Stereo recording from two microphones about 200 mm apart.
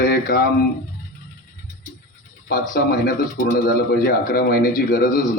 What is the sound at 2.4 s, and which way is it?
A man's voice, 50° left (ahead or behind).